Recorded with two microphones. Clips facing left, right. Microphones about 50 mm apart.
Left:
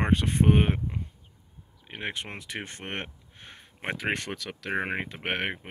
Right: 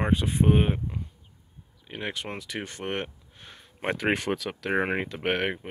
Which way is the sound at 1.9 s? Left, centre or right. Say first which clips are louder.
Right 1 dB; left.